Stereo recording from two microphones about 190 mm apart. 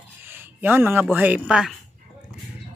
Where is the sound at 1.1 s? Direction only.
10° right (ahead or behind).